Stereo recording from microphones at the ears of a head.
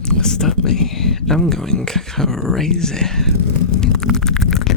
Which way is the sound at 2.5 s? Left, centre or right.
Left.